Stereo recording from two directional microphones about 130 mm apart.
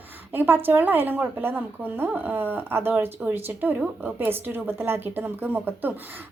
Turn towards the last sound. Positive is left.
turn(degrees=-15)  # may be behind; listen again after turning